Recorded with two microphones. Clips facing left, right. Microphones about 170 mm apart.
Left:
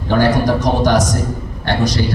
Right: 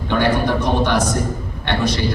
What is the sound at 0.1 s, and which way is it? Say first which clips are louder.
Speech: left 4 dB; 40° left (ahead or behind).